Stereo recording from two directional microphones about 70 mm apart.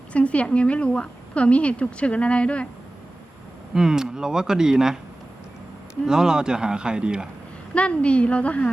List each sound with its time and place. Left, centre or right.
0.1 s a woman's voice: centre
3.8 s speech: centre
6.1 s speech: centre
7.7 s a woman's voice: centre